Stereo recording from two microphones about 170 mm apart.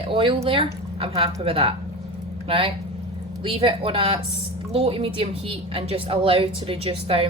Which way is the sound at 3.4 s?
30° right (ahead or behind).